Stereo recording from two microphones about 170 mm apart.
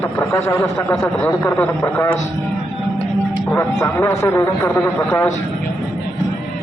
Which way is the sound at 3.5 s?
15° left (ahead or behind).